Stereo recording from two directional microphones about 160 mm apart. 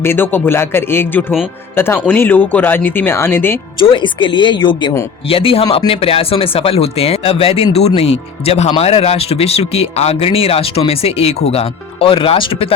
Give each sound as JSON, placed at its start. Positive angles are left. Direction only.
{"t": 0.0, "sound": "speech", "side_deg": 15}
{"t": 3.8, "sound": "speech", "side_deg": 30}